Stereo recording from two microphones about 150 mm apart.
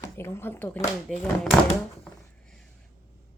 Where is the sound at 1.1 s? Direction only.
Centre (ahead or behind).